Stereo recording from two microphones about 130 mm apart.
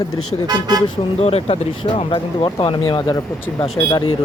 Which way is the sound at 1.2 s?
50° left (ahead or behind).